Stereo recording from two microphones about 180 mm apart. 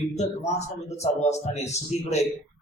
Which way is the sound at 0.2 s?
40° left (ahead or behind).